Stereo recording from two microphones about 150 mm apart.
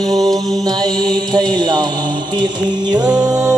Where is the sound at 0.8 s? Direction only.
30° right (ahead or behind).